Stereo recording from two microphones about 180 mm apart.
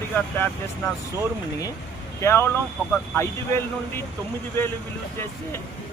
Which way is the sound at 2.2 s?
15° left (ahead or behind).